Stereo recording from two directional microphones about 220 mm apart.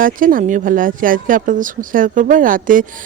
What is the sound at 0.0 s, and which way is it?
Speech, 40° right (ahead or behind).